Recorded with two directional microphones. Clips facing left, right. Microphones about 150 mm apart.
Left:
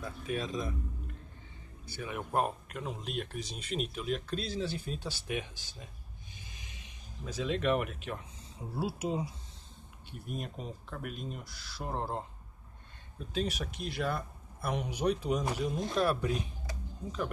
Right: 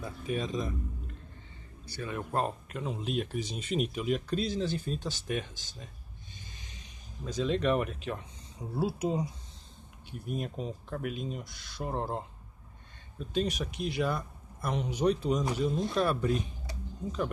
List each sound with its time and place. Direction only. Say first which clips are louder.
0.0 s speech: right 2 dB; centre (ahead or behind)
2.0 s speech: even; 15° left (ahead or behind)
6.3 s snort: right 1 dB; 10° left (ahead or behind)
7.2 s speech: right 2 dB; 5° left (ahead or behind)
13.3 s speech: right 3 dB; centre (ahead or behind)